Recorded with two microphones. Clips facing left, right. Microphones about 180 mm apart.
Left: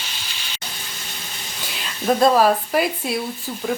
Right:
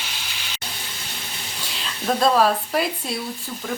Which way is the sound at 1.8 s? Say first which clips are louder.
Left 4 dB; 5° left (ahead or behind).